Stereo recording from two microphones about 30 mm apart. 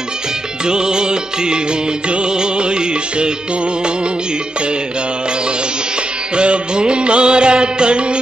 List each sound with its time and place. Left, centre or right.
0.7 s music: right
6.3 s music: right